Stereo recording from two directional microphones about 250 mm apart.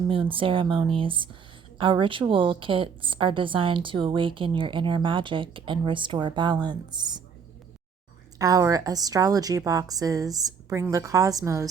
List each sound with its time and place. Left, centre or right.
0.1 s a woman's voice: right
8.4 s a woman's voice: centre